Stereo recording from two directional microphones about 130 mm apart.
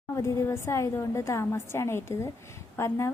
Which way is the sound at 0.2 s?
25° left (ahead or behind).